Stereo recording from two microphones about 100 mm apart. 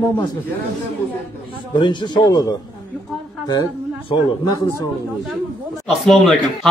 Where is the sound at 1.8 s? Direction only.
50° left (ahead or behind).